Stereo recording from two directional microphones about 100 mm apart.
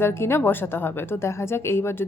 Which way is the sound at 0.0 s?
25° left (ahead or behind).